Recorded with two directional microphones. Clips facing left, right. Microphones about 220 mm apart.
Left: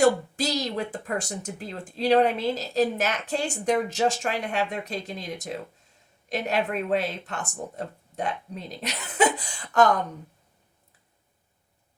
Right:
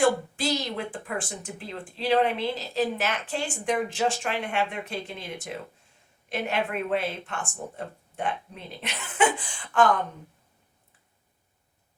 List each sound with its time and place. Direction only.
0.0 s a woman's voice: 40° left (ahead or behind)